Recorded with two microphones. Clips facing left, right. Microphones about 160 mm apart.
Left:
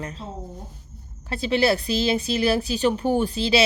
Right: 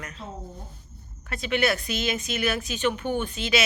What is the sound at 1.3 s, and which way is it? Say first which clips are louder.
Speech: left 4 dB; 30° left (ahead or behind).